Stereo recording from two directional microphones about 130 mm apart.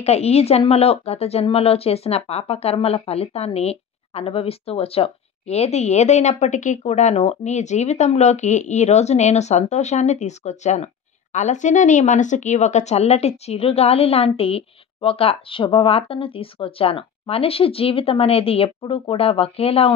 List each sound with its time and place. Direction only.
0.0 s speech: 55° left (ahead or behind)